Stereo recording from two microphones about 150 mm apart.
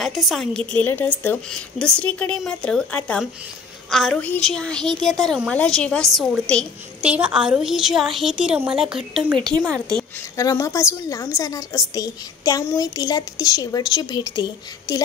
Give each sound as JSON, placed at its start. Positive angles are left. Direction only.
{"t": 0.0, "sound": "a woman's voice", "side_deg": 0}
{"t": 7.0, "sound": "a woman's voice", "side_deg": -10}
{"t": 10.3, "sound": "a woman's voice", "side_deg": 20}